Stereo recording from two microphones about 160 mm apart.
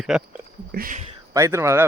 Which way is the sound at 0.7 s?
65° right (ahead or behind).